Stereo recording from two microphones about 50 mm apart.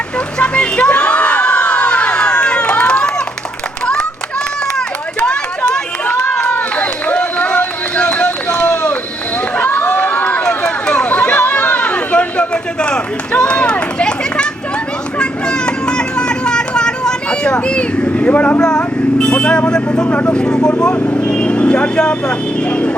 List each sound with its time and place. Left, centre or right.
0.3 s crowd: left
6.4 s run: left
9.8 s run: left
10.4 s run: centre
11.4 s a sound: left; by 14.4 s centre
15.2 s music: centre
18.6 s vehicle: centre
20.2 s speech: centre